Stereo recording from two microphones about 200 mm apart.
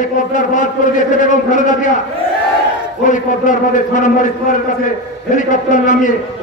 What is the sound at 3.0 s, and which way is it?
A man's voice, 40° left (ahead or behind).